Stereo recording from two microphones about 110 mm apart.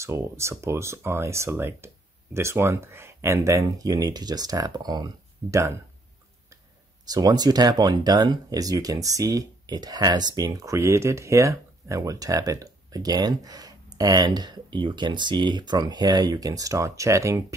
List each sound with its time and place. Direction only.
0.0 s speech: 25° right (ahead or behind)
7.1 s speech: 35° right (ahead or behind)